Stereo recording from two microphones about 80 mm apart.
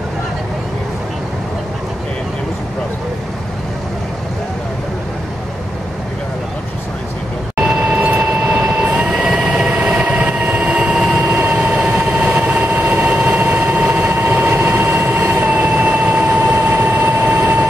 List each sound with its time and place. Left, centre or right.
7.5 s vehicle: centre